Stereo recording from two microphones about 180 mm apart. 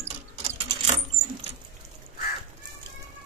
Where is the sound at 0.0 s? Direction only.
35° right (ahead or behind).